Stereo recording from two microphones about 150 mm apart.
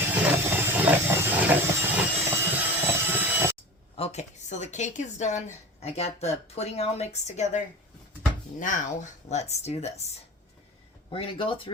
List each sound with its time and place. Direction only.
0.1 s a sound: 15° right (ahead or behind)
3.9 s speech: 45° left (ahead or behind)
11.1 s speech: 35° left (ahead or behind)